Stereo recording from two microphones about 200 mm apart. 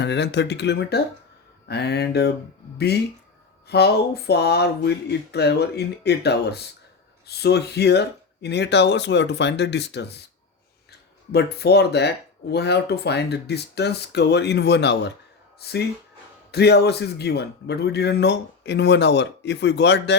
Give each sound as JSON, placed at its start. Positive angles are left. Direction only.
{"t": 0.0, "sound": "speech", "side_deg": 60}
{"t": 11.3, "sound": "speech", "side_deg": 55}